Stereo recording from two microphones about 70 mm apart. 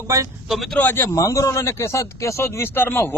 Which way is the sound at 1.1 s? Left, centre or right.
Left.